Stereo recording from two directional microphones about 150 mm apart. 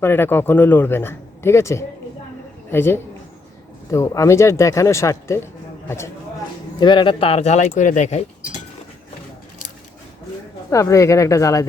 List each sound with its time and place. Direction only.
0.0 s speech: 15° left (ahead or behind)
6.7 s speech: 30° left (ahead or behind); by 8.2 s 50° left (ahead or behind)
10.7 s speech: 20° left (ahead or behind)